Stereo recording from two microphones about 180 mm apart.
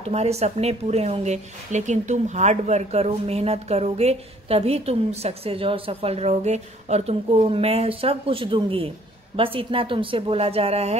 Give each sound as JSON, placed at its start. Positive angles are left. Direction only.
{"t": 0.0, "sound": "speech", "side_deg": -35}